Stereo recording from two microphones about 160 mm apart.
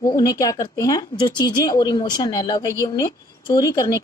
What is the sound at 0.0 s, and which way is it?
Speech, 20° left (ahead or behind).